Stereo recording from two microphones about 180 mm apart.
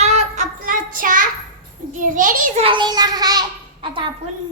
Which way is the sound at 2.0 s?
50° right (ahead or behind).